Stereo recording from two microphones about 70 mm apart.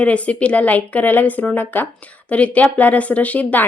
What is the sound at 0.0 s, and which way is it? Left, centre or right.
A woman's voice, centre.